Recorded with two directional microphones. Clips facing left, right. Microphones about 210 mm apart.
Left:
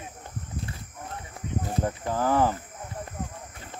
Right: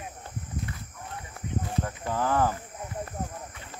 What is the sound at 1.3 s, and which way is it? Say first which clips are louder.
Cricket: left 1 dB; 20° left (ahead or behind).